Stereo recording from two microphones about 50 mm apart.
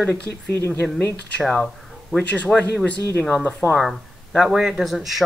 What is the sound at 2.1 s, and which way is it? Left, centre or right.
Speech, left.